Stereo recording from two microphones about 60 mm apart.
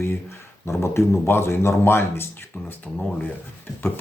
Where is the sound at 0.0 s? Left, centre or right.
Left.